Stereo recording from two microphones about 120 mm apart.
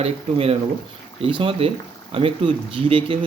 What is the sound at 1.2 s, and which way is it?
Speech, 45° right (ahead or behind).